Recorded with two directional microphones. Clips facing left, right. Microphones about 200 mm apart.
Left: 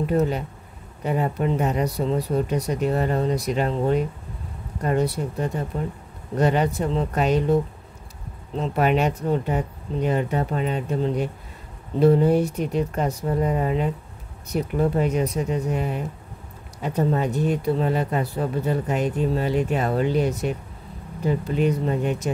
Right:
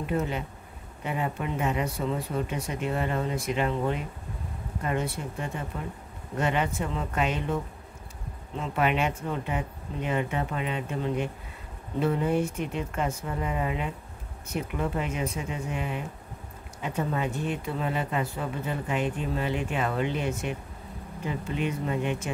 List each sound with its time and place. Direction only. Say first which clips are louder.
0.0 s speech: left 7 dB; 40° left (ahead or behind)